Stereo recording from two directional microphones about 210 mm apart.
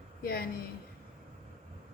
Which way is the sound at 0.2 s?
45° left (ahead or behind).